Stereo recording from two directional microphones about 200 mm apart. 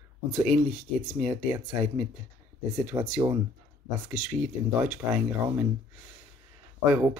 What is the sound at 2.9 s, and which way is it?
Speech, 20° right (ahead or behind).